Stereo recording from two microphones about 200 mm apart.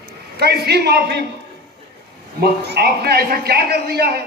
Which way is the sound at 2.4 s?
55° right (ahead or behind).